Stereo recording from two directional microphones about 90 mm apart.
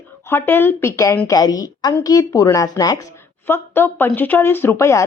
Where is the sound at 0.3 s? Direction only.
25° left (ahead or behind).